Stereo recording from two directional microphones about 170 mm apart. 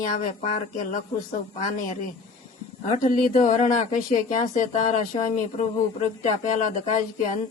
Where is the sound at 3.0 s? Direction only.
50° left (ahead or behind).